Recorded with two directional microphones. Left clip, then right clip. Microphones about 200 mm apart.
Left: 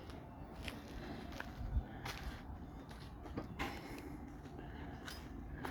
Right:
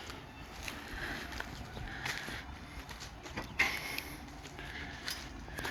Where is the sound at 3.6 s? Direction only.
30° left (ahead or behind).